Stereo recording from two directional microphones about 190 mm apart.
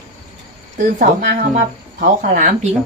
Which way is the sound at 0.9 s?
45° right (ahead or behind).